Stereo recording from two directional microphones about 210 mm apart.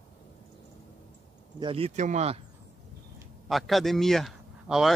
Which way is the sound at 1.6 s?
25° right (ahead or behind).